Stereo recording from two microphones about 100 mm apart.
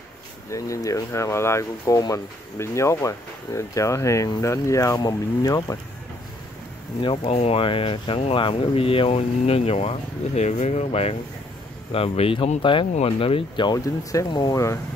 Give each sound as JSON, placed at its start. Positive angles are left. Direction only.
{"t": 0.5, "sound": "speech", "side_deg": 35}
{"t": 7.2, "sound": "speech", "side_deg": 90}
{"t": 11.9, "sound": "speech", "side_deg": 70}
{"t": 13.6, "sound": "speech", "side_deg": 45}